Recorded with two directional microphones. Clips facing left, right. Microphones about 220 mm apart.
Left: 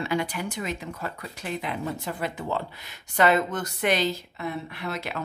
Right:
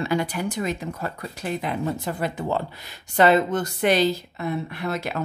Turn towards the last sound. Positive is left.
turn(degrees=-40)  # may be behind; listen again after turning